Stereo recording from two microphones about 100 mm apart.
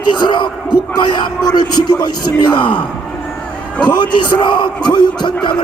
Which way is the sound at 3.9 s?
50° left (ahead or behind).